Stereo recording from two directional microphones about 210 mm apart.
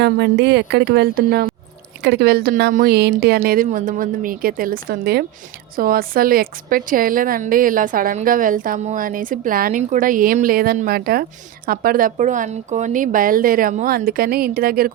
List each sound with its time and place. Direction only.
0.0 s a woman's voice: 55° right (ahead or behind)